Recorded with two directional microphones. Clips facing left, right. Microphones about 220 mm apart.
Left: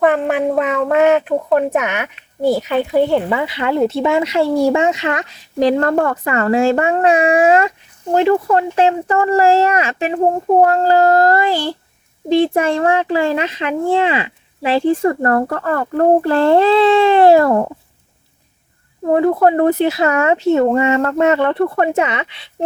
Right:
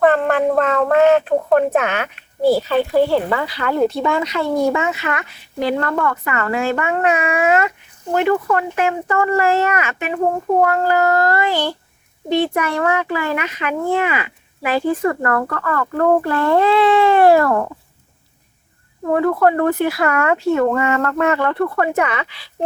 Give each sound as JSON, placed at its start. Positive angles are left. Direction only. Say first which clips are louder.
{"t": 0.0, "sound": "a child's voice", "louder": "even", "side_deg": 15}
{"t": 12.5, "sound": "a child's voice", "louder": "left 4 dB", "side_deg": 30}
{"t": 19.1, "sound": "a child's voice", "louder": "left 3 dB", "side_deg": 25}